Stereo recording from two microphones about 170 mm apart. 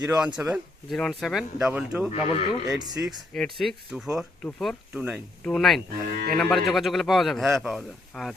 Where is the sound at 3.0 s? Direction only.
Centre (ahead or behind).